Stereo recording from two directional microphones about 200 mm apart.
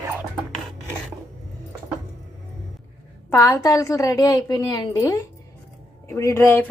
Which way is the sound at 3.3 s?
15° left (ahead or behind).